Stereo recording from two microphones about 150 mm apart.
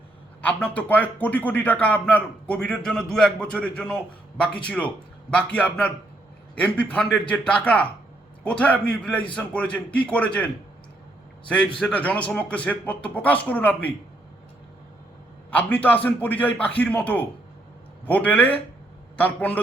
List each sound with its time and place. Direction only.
0.4 s a man's voice: 10° left (ahead or behind)
15.4 s a man's voice: 10° left (ahead or behind)